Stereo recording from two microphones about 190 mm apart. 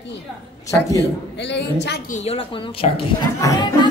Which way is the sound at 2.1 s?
35° left (ahead or behind).